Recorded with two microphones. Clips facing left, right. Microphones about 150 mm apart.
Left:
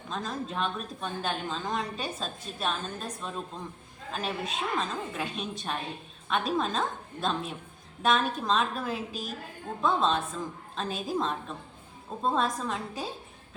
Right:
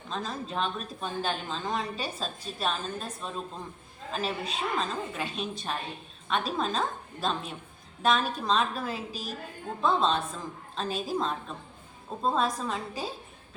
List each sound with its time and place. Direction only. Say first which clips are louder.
0.1 s a woman's voice: even; centre (ahead or behind)